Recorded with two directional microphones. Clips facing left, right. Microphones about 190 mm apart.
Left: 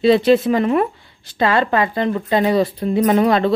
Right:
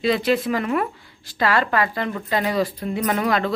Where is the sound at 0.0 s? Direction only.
30° left (ahead or behind).